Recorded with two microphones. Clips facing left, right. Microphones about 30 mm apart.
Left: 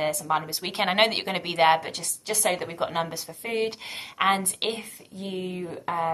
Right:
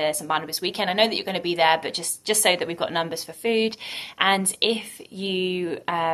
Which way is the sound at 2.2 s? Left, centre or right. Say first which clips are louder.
Right 5 dB; right.